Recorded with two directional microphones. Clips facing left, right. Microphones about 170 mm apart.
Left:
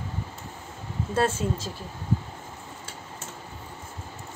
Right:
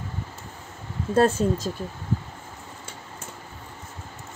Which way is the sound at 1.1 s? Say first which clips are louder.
Right 6 dB; 40° right (ahead or behind).